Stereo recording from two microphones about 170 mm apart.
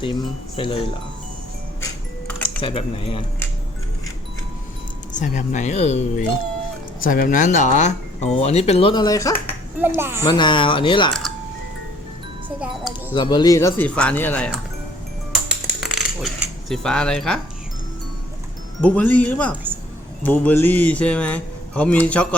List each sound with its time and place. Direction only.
0.0 s speech: 30° left (ahead or behind)
2.6 s speech: 30° left (ahead or behind)
5.1 s speech: 45° left (ahead or behind)
7.0 s speech: 55° left (ahead or behind); by 9.3 s 20° left (ahead or behind)
10.0 s a child's voice: 15° right (ahead or behind)
10.2 s speech: 25° left (ahead or behind)
12.5 s speech: 5° right (ahead or behind)
13.1 s speech: 25° left (ahead or behind); by 14.5 s 10° left (ahead or behind)
15.4 s cutlery: 5° right (ahead or behind)
18.8 s speech: 10° left (ahead or behind)